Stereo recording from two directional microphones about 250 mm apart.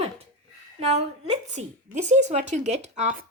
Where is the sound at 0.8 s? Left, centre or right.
Right.